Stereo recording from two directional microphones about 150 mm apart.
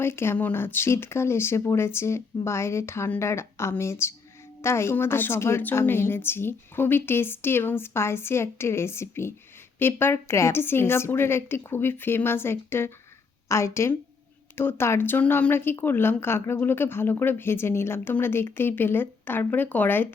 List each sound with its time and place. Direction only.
0.0 s a woman's voice: 15° left (ahead or behind)